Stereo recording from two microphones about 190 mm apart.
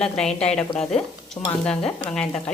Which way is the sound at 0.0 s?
5° left (ahead or behind).